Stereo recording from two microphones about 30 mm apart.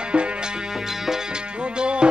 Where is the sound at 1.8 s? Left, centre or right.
Right.